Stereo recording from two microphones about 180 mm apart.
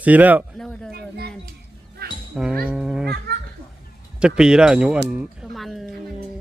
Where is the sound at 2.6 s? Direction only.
5° right (ahead or behind).